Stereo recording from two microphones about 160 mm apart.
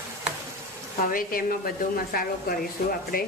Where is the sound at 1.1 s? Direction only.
65° left (ahead or behind).